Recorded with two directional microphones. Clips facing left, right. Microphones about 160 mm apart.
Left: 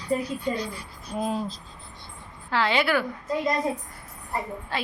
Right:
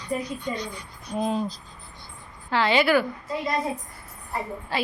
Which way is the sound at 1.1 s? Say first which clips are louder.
Right 2 dB; 5° left (ahead or behind).